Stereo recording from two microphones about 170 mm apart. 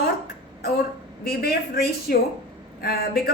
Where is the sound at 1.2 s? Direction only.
65° left (ahead or behind).